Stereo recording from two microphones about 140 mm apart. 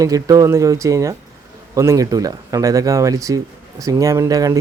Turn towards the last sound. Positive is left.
turn(degrees=-25)  # may be behind; listen again after turning